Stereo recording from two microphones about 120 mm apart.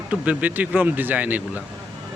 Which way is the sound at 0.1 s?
10° right (ahead or behind).